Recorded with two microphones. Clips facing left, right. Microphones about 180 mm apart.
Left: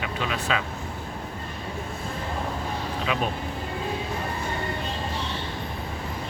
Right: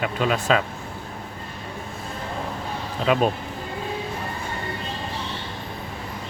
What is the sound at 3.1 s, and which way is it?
Speech, 45° right (ahead or behind).